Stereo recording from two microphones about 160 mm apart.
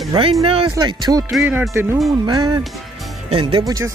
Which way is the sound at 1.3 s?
Centre (ahead or behind).